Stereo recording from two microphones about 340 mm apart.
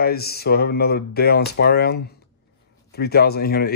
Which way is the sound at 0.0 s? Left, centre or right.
Left.